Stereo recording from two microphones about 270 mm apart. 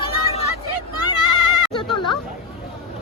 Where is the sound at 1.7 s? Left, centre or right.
Centre.